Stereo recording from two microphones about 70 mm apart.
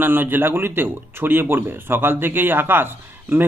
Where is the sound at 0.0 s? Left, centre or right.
Right.